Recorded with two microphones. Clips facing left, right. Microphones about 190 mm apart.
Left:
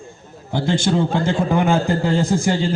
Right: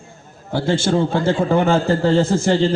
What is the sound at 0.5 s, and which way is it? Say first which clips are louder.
A man's voice: right 1 dB; 15° left (ahead or behind).